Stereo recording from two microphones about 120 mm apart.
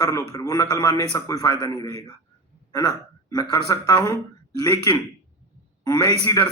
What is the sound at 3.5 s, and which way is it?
Speech, 30° left (ahead or behind).